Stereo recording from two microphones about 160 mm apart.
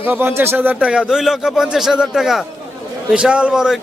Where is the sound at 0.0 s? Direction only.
10° right (ahead or behind).